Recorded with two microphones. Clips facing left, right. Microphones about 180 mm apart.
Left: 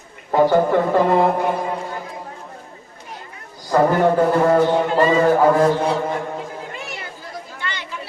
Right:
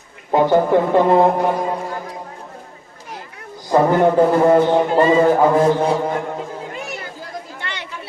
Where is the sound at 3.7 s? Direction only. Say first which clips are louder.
Right 2 dB; 25° right (ahead or behind).